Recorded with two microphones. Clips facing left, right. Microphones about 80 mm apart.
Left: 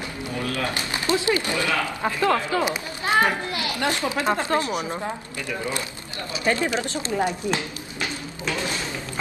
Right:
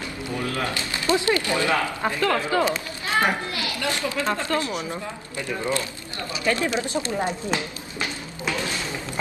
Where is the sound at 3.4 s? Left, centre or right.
Left.